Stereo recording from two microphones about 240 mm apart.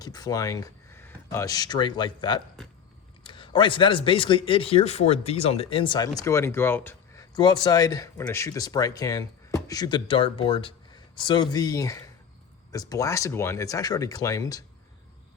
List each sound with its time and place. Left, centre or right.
0.0 s speech: centre